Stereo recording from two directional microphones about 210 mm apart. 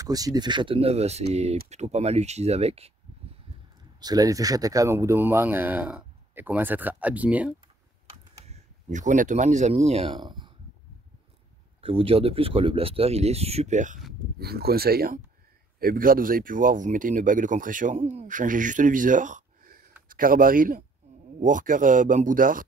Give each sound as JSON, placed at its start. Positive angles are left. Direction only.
{"t": 0.0, "sound": "speech", "side_deg": -15}
{"t": 4.0, "sound": "speech", "side_deg": -15}
{"t": 8.5, "sound": "speech", "side_deg": -35}
{"t": 11.8, "sound": "speech", "side_deg": -25}
{"t": 14.4, "sound": "speech", "side_deg": -50}